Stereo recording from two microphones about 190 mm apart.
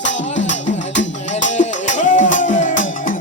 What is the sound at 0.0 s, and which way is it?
Music, 75° left (ahead or behind).